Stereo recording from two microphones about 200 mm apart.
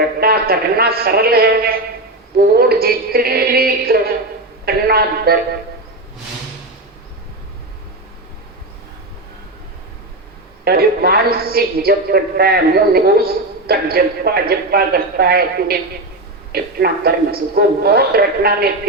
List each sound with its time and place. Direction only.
0.2 s a man's voice: 50° right (ahead or behind)
10.6 s a man's voice: 50° right (ahead or behind)